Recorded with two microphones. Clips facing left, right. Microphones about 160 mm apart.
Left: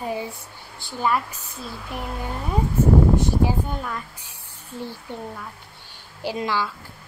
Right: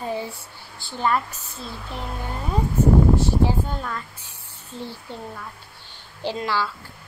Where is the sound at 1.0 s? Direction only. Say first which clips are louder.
Even; 10° left (ahead or behind).